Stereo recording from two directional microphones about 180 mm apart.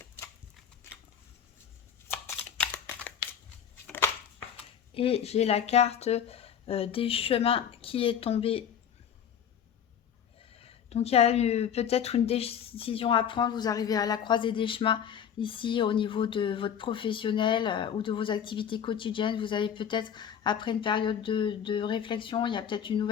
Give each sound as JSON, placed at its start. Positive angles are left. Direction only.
{"t": 2.0, "sound": "a sound", "side_deg": 10}
{"t": 4.9, "sound": "speech", "side_deg": 35}
{"t": 10.5, "sound": "speech", "side_deg": 35}